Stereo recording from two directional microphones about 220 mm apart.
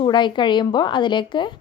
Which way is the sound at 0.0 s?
20° left (ahead or behind).